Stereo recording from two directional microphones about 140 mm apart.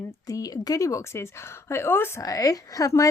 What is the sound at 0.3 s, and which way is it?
Speech, 25° left (ahead or behind).